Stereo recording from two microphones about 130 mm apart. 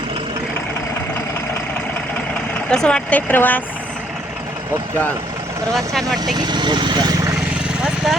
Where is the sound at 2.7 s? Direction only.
5° left (ahead or behind).